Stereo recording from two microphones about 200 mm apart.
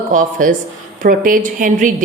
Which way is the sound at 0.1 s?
40° right (ahead or behind).